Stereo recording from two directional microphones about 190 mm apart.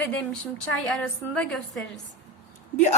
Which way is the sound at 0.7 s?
5° left (ahead or behind).